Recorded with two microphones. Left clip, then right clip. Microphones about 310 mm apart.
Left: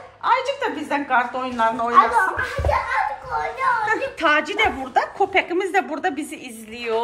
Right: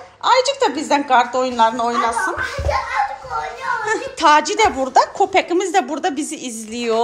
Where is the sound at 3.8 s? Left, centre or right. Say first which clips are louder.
Right 4 dB; centre.